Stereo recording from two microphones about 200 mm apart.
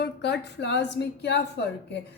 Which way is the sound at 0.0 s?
55° left (ahead or behind).